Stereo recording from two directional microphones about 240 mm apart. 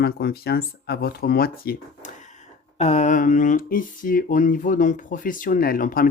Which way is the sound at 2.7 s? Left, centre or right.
Left.